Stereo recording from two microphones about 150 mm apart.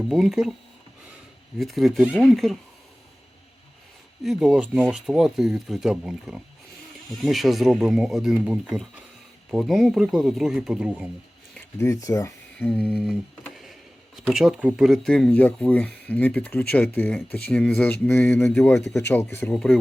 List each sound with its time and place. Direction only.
0.1 s speech: centre (ahead or behind)
1.5 s speech: centre (ahead or behind)
4.2 s speech: centre (ahead or behind)
11.8 s speech: 20° left (ahead or behind)
12.5 s a sound: 10° left (ahead or behind)
12.9 s a sound: centre (ahead or behind)
14.3 s speech: 5° right (ahead or behind); by 19.5 s 15° left (ahead or behind)
19.5 s speech: centre (ahead or behind)